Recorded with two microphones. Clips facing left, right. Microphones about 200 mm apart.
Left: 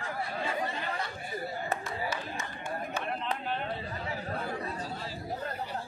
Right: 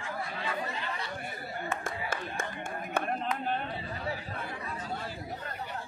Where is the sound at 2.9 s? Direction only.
45° right (ahead or behind).